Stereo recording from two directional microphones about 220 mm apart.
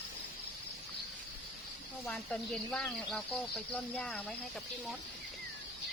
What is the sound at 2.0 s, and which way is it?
Speech, 5° left (ahead or behind).